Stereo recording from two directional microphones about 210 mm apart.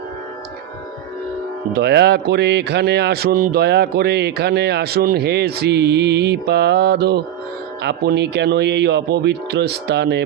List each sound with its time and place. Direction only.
1.7 s a man's voice: 50° right (ahead or behind)